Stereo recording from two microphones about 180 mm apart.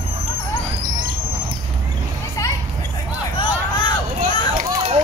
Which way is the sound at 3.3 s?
25° left (ahead or behind).